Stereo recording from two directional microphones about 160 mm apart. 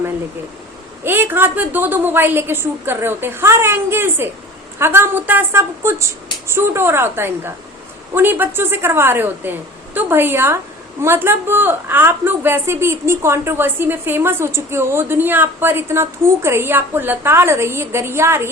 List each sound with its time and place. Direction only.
1.0 s a woman's voice: 15° right (ahead or behind)